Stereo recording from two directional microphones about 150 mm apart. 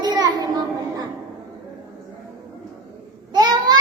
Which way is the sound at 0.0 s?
25° right (ahead or behind).